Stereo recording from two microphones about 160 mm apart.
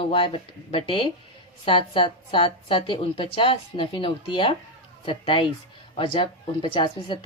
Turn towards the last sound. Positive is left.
turn(degrees=30)  # may be behind; listen again after turning